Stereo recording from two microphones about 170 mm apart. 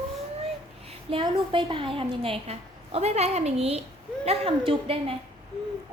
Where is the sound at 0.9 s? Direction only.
30° right (ahead or behind).